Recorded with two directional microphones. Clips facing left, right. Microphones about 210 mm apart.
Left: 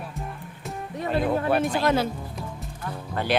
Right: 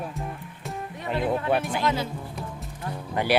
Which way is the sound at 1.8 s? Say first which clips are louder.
Left 4 dB; 55° left (ahead or behind).